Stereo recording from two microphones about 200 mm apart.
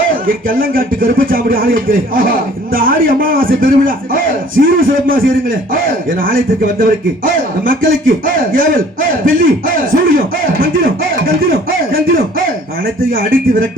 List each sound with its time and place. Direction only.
0.1 s a man's voice: 45° right (ahead or behind)
13.1 s a man's voice: 45° right (ahead or behind)